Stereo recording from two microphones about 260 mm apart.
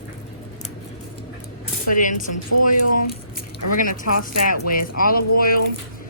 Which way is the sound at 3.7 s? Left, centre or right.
Left.